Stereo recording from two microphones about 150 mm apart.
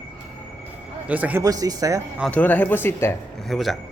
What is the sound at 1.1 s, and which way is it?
Speech, 10° right (ahead or behind).